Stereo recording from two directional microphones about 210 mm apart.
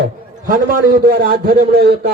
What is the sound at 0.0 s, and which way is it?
A man's voice, 40° right (ahead or behind).